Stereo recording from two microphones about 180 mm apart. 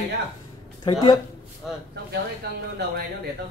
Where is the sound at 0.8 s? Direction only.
25° left (ahead or behind).